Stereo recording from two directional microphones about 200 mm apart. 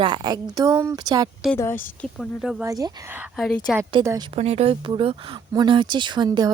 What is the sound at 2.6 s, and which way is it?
Speech, 15° right (ahead or behind).